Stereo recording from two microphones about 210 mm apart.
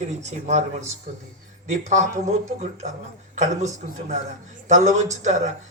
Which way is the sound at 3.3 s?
35° right (ahead or behind).